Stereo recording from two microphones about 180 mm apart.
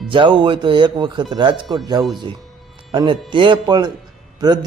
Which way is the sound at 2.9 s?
25° right (ahead or behind).